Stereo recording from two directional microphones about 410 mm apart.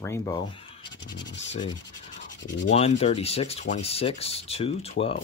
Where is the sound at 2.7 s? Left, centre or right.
Centre.